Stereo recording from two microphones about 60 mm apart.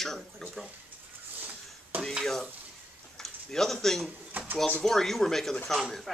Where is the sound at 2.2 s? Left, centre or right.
Centre.